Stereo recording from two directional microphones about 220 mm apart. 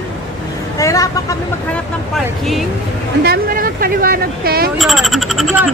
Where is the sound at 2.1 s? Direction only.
Centre (ahead or behind).